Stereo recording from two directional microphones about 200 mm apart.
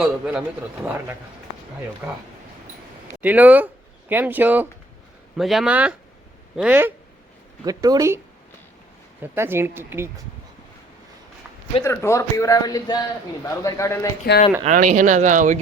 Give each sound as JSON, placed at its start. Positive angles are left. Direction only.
{"t": 0.0, "sound": "a man's voice", "side_deg": -5}
{"t": 7.6, "sound": "a man's voice", "side_deg": -20}
{"t": 9.2, "sound": "a man's voice", "side_deg": -10}
{"t": 11.8, "sound": "speech", "side_deg": 15}
{"t": 14.6, "sound": "speech", "side_deg": -40}